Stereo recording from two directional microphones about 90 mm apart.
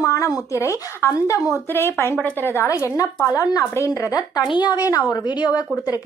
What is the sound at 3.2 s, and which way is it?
A woman's voice, 45° left (ahead or behind).